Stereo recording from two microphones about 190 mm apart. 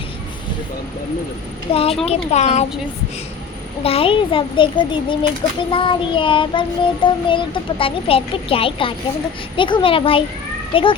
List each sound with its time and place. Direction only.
1.7 s speech: 30° left (ahead or behind)
3.8 s child singing: 30° left (ahead or behind)